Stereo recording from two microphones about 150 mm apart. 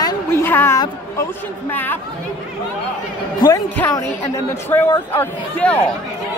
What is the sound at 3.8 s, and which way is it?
Speech, 15° left (ahead or behind).